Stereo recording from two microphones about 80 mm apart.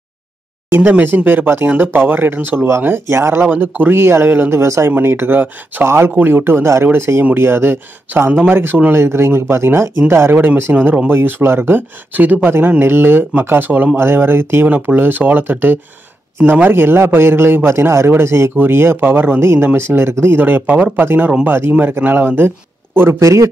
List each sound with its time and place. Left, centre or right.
0.7 s a man's voice: right
8.3 s a man's voice: centre; by 23.5 s right